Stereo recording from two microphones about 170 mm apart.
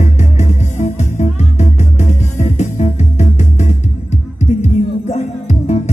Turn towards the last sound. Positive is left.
turn(degrees=40)  # may be behind; listen again after turning